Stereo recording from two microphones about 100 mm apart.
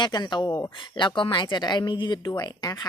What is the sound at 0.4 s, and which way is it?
Speech, 25° left (ahead or behind).